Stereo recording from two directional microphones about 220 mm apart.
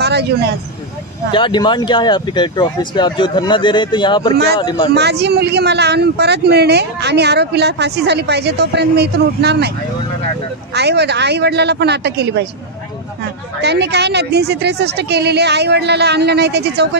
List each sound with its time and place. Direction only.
0.0 s vehicle: 50° right (ahead or behind)
1.3 s speech: 20° left (ahead or behind)
4.9 s speech: 50° right (ahead or behind)
10.7 s speech: 50° right (ahead or behind)
13.6 s speech: 50° right (ahead or behind)